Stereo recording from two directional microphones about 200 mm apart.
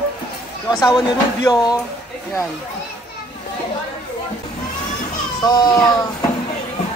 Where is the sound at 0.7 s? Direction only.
20° left (ahead or behind).